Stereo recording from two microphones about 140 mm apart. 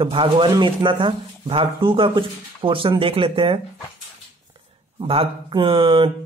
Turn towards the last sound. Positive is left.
turn(degrees=-35)  # may be behind; listen again after turning